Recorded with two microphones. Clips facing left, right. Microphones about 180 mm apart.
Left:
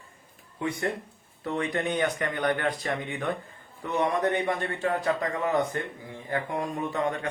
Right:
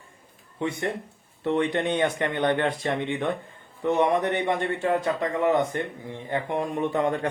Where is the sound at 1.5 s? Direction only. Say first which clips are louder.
Right 5 dB; 30° right (ahead or behind).